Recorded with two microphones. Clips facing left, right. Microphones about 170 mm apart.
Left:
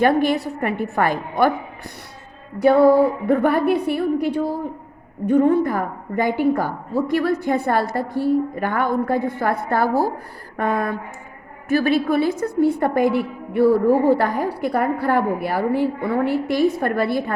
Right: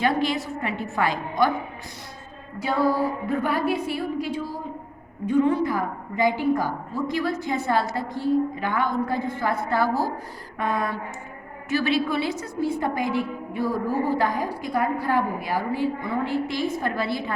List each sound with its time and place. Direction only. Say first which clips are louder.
0.0 s a woman's voice: left 6 dB; 55° left (ahead or behind)
2.6 s a woman's voice: left 10 dB; 60° left (ahead or behind)